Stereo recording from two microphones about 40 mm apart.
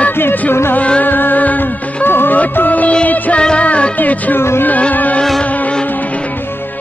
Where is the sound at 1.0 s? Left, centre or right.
Left.